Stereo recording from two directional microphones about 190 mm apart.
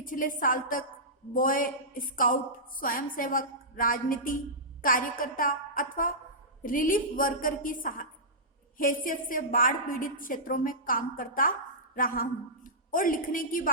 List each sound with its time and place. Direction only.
0.0 s a woman's voice: 45° left (ahead or behind)